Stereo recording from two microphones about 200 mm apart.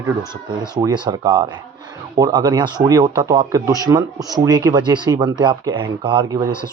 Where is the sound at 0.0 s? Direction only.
20° right (ahead or behind).